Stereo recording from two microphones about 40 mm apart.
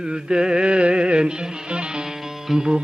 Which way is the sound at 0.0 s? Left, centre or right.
Right.